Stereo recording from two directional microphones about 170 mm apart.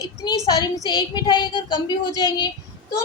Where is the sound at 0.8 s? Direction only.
25° left (ahead or behind).